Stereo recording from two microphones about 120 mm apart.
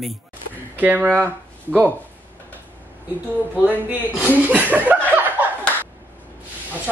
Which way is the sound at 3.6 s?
10° right (ahead or behind).